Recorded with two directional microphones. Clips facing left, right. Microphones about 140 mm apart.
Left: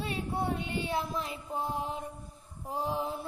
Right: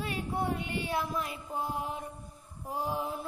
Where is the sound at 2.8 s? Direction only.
30° left (ahead or behind).